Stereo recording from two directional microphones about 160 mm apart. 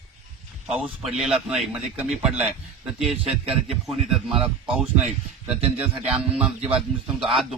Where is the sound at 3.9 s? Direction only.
Centre (ahead or behind).